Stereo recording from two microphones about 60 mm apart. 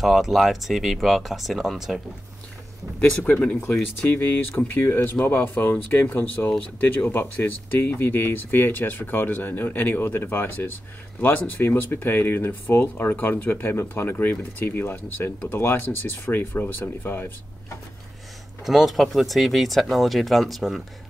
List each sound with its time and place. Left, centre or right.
0.0 s speech: centre
3.3 s speech: left
4.1 s speech: left
18.6 s speech: centre